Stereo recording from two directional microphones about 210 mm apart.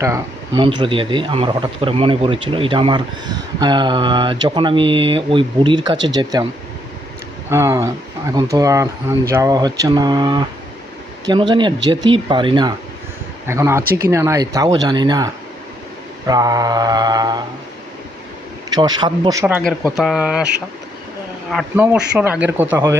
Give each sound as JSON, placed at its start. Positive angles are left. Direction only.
{"t": 0.0, "sound": "a man's voice", "side_deg": -15}
{"t": 7.5, "sound": "a man's voice", "side_deg": -15}
{"t": 18.7, "sound": "a man's voice", "side_deg": -20}
{"t": 19.8, "sound": "speech", "side_deg": 0}
{"t": 21.8, "sound": "speech", "side_deg": -5}